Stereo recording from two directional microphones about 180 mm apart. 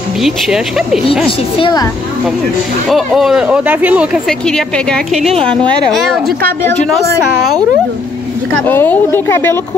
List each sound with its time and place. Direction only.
0.2 s speech: centre (ahead or behind)
1.6 s a woman's voice: 20° left (ahead or behind)
2.9 s speech: centre (ahead or behind)
8.6 s a woman's voice: 10° left (ahead or behind)